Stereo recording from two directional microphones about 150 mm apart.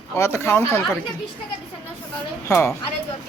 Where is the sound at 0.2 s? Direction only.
15° left (ahead or behind).